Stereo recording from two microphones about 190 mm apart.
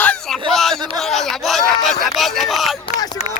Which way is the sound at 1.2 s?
Centre (ahead or behind).